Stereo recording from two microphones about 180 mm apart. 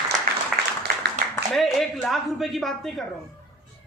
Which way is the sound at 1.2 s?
45° right (ahead or behind).